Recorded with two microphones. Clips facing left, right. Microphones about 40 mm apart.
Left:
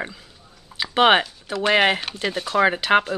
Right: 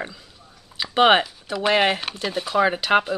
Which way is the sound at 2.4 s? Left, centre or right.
Centre.